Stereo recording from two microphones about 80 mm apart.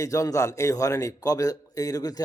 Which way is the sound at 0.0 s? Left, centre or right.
Left.